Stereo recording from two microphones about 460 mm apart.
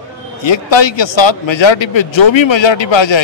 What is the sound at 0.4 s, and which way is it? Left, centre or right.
Speech, left.